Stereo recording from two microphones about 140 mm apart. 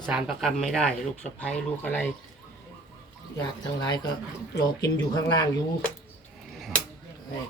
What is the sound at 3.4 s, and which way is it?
Speech, 30° left (ahead or behind).